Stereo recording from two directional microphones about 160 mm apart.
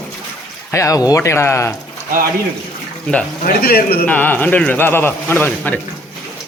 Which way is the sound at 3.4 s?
70° left (ahead or behind).